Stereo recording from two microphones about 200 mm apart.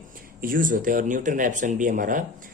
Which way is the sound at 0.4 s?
45° right (ahead or behind).